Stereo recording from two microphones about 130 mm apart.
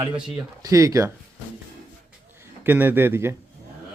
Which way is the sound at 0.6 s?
25° right (ahead or behind).